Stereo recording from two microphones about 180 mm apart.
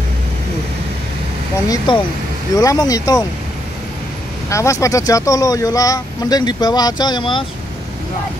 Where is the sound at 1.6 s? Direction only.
20° left (ahead or behind).